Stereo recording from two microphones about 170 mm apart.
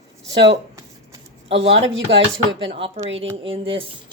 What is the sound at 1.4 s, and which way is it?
Speech, 35° right (ahead or behind).